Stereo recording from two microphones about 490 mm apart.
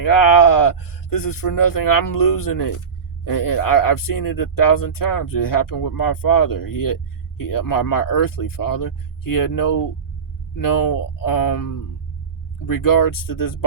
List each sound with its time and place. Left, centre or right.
0.0 s speech: left